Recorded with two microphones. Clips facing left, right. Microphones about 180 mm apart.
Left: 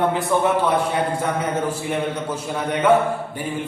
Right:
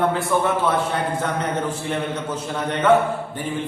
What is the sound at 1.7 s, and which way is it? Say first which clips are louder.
Speech: left 1 dB; 10° left (ahead or behind).